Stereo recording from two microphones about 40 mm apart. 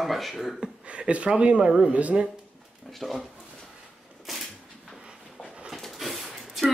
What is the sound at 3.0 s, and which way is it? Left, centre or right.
Speech, centre.